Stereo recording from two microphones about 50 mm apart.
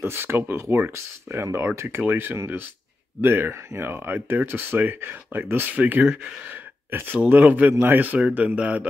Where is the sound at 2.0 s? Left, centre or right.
Right.